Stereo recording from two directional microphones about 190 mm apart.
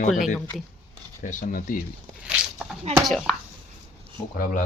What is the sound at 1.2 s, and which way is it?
Speech, 45° left (ahead or behind).